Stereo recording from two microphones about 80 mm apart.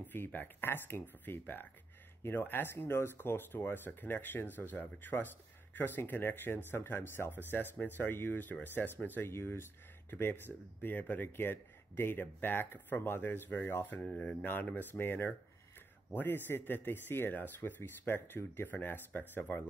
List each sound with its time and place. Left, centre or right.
0.0 s speech: left
10.8 s speech: left
14.0 s speech: centre
14.4 s speech: left